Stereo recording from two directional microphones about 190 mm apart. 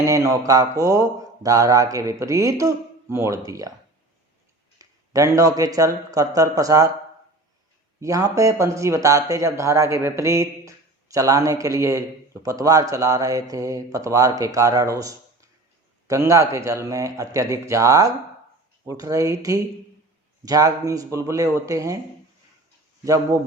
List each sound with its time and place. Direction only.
0.0 s speech: 15° right (ahead or behind)
4.8 s speech: 15° right (ahead or behind)
8.0 s speech: 15° right (ahead or behind)
23.0 s speech: 15° right (ahead or behind)